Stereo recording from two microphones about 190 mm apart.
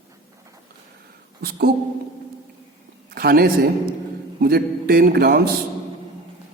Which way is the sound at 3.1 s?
55° right (ahead or behind).